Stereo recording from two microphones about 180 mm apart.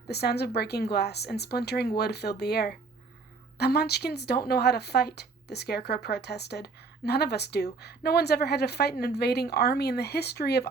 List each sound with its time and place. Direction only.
0.1 s speech: 65° left (ahead or behind)